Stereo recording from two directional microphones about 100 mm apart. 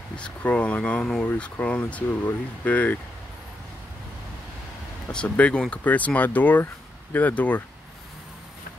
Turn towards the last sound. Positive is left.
turn(degrees=15)  # may be behind; listen again after turning